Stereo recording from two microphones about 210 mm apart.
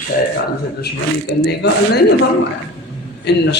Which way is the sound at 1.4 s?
55° left (ahead or behind).